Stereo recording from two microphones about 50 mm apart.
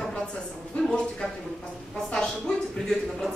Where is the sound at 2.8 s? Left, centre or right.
Centre.